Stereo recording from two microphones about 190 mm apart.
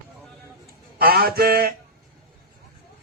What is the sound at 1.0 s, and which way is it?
Speech, 55° right (ahead or behind).